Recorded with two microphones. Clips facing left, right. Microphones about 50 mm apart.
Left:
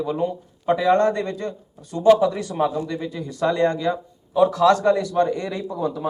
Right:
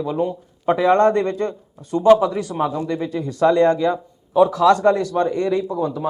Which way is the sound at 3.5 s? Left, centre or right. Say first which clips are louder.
Right 3 dB; centre.